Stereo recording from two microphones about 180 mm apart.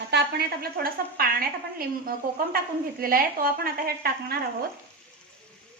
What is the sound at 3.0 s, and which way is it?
Speech, 55° right (ahead or behind).